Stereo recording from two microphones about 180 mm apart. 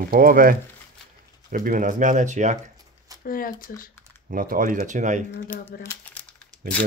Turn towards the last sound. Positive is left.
turn(degrees=10)  # may be behind; listen again after turning